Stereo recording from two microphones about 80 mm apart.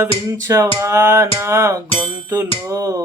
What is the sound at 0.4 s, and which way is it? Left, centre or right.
Music, right.